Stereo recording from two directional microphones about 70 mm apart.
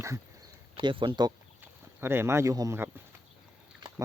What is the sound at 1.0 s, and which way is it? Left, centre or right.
Speech, right.